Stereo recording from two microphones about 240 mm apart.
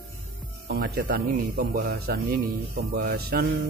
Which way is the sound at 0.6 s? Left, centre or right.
Right.